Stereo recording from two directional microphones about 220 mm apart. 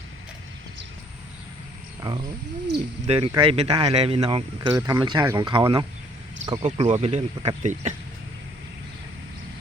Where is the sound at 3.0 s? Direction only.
25° right (ahead or behind).